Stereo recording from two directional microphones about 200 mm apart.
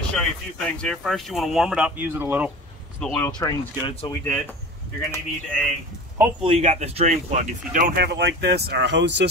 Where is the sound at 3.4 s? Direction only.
20° left (ahead or behind).